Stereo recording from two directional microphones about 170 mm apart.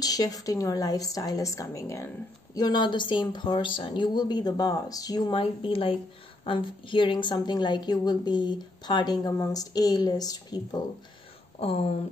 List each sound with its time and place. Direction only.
0.0 s a woman's voice: 20° left (ahead or behind)
11.6 s speech: 35° left (ahead or behind)